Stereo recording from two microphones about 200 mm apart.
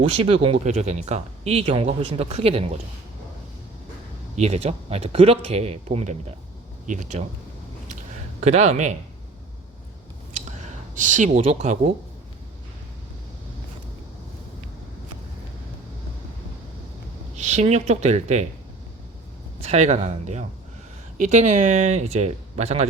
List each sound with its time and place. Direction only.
0.1 s speech: 30° right (ahead or behind)
4.4 s speech: 30° right (ahead or behind)
8.4 s speech: 35° right (ahead or behind)
10.3 s a sound: 35° right (ahead or behind)
17.3 s speech: 35° right (ahead or behind)
19.6 s speech: 35° right (ahead or behind)